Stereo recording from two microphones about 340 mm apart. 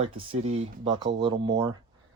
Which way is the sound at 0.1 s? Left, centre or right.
Centre.